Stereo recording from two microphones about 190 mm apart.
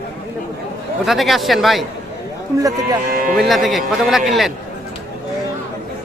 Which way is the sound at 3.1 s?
50° right (ahead or behind).